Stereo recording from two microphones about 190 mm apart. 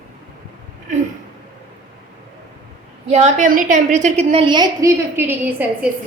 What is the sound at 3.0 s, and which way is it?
A woman's voice, 40° right (ahead or behind).